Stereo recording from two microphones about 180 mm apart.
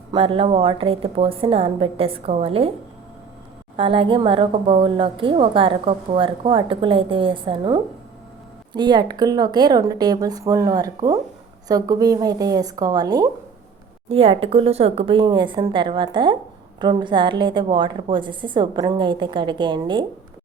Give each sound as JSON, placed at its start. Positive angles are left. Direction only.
{"t": 0.1, "sound": "a woman's voice", "side_deg": -30}
{"t": 3.8, "sound": "a woman's voice", "side_deg": -30}
{"t": 14.1, "sound": "a woman's voice", "side_deg": -30}